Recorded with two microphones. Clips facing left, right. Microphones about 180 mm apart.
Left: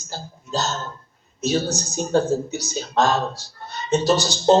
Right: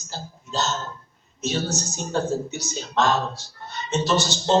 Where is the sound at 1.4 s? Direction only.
35° left (ahead or behind).